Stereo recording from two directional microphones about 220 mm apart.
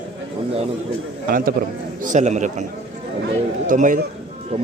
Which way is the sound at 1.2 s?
40° right (ahead or behind).